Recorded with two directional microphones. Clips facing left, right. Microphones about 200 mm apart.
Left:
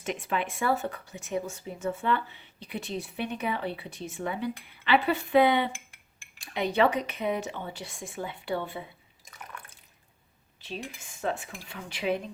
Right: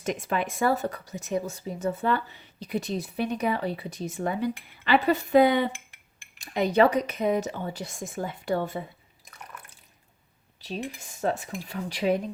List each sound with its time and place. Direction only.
0.0 s speech: 40° right (ahead or behind)
9.4 s water: centre (ahead or behind)
10.6 s speech: 40° right (ahead or behind)